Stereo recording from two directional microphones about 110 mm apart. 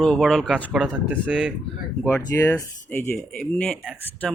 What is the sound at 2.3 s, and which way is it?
Speech, 25° left (ahead or behind).